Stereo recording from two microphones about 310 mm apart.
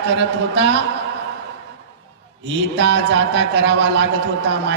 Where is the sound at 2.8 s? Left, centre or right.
Right.